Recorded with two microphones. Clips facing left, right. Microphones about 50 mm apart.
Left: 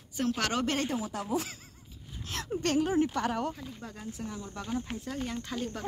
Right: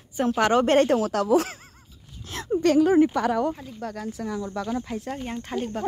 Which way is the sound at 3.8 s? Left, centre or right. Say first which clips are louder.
Right 11 dB; right.